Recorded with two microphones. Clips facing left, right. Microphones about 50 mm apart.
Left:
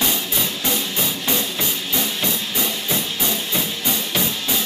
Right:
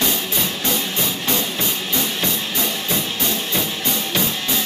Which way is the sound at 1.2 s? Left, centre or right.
Centre.